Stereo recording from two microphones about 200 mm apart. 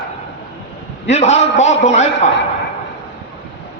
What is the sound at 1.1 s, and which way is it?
A man's voice, 35° left (ahead or behind).